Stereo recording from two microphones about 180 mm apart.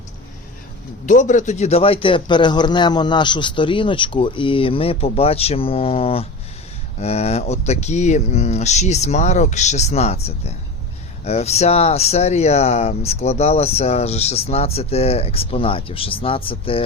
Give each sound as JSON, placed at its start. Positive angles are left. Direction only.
{"t": 1.0, "sound": "a man's voice", "side_deg": 45}